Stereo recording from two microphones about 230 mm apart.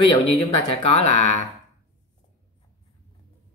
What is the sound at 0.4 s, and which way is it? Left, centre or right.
Speech, left.